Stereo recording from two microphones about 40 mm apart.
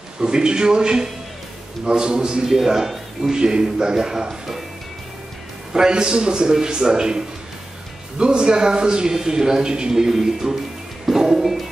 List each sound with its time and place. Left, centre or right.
0.2 s a man's voice: centre
2.4 s speech: centre
5.7 s a man's voice: centre
11.1 s music: centre